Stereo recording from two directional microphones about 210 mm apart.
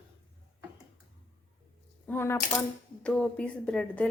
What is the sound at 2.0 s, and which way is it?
A woman's voice, 10° left (ahead or behind).